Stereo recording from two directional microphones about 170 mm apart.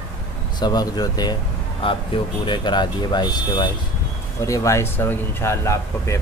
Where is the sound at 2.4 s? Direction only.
25° left (ahead or behind).